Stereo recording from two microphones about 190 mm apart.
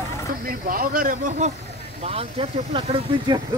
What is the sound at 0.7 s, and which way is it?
Speech, 50° right (ahead or behind).